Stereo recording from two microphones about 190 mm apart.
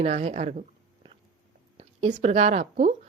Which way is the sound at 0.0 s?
35° right (ahead or behind).